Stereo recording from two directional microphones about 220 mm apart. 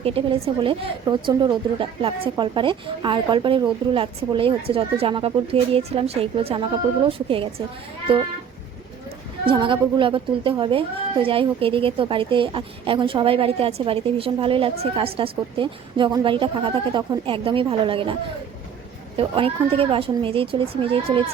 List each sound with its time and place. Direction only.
0.0 s speech: 25° right (ahead or behind)
9.5 s speech: 20° right (ahead or behind)